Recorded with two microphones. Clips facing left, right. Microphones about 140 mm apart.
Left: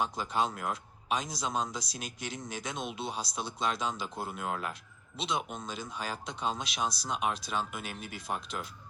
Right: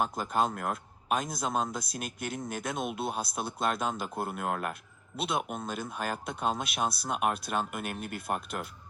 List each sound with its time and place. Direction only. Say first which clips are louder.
0.0 s a man's voice: right 2 dB; 50° right (ahead or behind)